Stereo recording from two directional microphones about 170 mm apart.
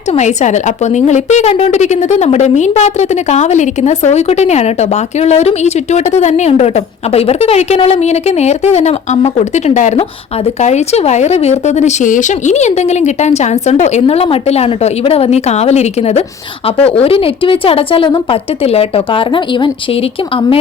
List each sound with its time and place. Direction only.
0.1 s a woman's voice: 40° left (ahead or behind)